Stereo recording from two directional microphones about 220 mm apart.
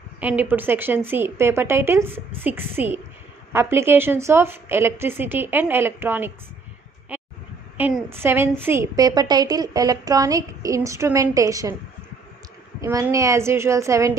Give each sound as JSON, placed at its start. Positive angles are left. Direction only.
{"t": 0.2, "sound": "a woman's voice", "side_deg": -5}
{"t": 7.1, "sound": "a sound", "side_deg": -5}
{"t": 7.7, "sound": "a woman's voice", "side_deg": -5}
{"t": 12.8, "sound": "a woman's voice", "side_deg": -15}